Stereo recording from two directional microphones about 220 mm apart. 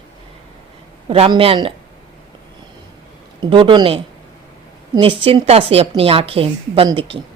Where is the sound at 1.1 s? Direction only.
25° right (ahead or behind).